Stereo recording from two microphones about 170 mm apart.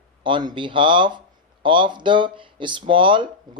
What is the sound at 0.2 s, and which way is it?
Speech, 30° right (ahead or behind).